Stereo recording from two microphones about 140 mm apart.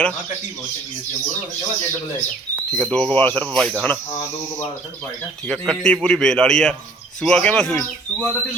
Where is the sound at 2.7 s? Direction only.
10° left (ahead or behind).